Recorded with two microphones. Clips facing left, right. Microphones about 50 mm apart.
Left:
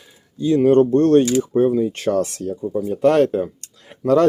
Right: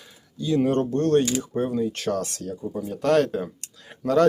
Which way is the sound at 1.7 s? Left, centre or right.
Centre.